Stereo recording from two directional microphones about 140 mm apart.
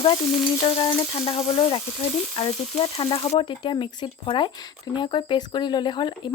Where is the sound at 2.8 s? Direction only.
40° left (ahead or behind).